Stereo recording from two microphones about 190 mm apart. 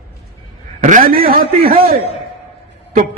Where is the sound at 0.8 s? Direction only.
45° right (ahead or behind).